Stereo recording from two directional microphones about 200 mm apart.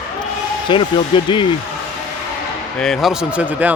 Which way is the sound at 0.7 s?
25° left (ahead or behind).